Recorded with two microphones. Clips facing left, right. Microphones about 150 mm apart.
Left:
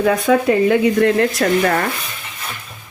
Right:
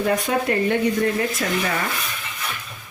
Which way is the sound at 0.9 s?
75° left (ahead or behind).